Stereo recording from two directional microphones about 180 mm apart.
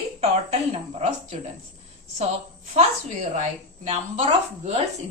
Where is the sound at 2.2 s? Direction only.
40° right (ahead or behind).